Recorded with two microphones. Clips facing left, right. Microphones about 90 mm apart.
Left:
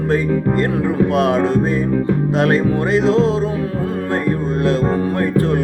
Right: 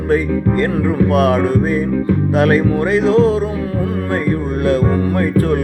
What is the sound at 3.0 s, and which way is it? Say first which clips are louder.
Music: right 3 dB; 20° left (ahead or behind).